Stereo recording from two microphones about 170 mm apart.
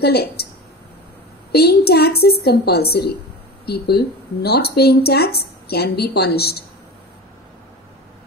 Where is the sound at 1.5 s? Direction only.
70° left (ahead or behind).